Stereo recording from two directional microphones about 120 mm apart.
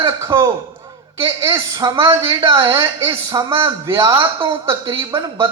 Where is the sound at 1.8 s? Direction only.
25° right (ahead or behind).